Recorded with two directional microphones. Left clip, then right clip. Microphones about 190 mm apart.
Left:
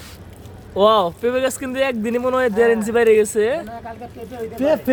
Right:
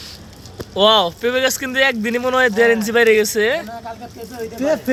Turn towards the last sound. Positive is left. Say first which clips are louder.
# left 1 dB
turn(degrees=40)  # may be behind; listen again after turning